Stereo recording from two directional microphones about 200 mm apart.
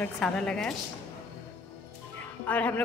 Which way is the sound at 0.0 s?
5° left (ahead or behind).